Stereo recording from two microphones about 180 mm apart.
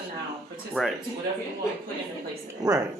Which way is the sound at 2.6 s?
20° right (ahead or behind).